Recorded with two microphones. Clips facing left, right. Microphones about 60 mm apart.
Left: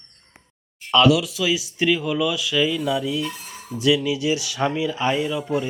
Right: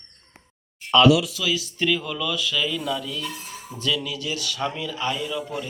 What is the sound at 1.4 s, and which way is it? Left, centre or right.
Speech, centre.